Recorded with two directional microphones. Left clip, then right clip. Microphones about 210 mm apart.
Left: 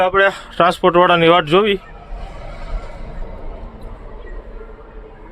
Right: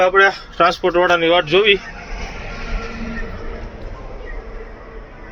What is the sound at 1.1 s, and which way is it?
Speech, 50° left (ahead or behind).